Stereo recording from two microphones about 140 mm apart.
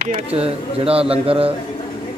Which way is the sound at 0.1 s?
45° right (ahead or behind).